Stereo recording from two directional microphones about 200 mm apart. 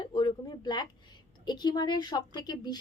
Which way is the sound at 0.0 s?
20° left (ahead or behind).